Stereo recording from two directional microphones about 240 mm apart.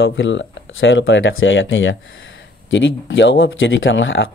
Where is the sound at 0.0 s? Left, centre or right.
Left.